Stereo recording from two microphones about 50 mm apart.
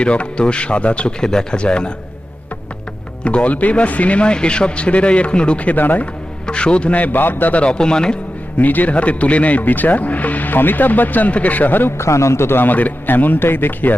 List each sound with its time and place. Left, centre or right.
0.0 s speech: left
3.2 s speech: left
6.4 s speech: left
7.5 s speech: left
8.5 s speech: left
11.9 s a man's voice: left
12.5 s a man's voice: left
12.7 s speech: left